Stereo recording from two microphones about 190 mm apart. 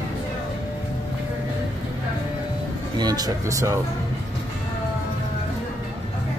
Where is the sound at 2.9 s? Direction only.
20° right (ahead or behind).